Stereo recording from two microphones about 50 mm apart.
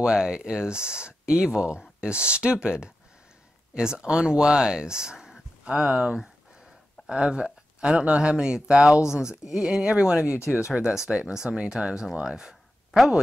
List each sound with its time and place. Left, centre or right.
0.0 s speech: centre
5.7 s speech: right
5.9 s a sound: centre
8.0 s speech: right